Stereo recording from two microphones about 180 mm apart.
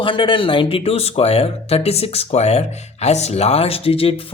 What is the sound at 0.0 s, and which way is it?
Speech, 30° left (ahead or behind).